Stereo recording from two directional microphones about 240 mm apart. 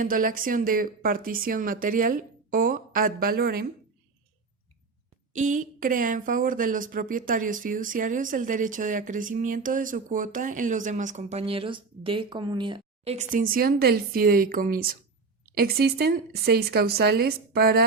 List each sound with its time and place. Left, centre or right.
0.0 s speech: right
5.3 s speech: right